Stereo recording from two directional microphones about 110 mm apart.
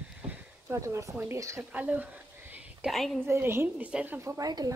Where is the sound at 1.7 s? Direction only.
15° right (ahead or behind).